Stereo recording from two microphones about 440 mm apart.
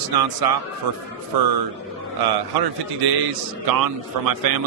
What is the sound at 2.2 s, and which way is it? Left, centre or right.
A man's voice, right.